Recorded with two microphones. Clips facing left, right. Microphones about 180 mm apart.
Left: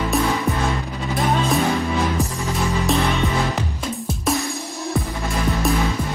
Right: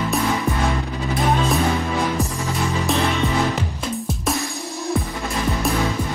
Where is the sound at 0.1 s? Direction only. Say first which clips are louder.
Left 3 dB; centre (ahead or behind).